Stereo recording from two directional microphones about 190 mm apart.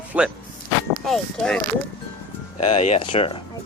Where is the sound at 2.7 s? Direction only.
35° left (ahead or behind).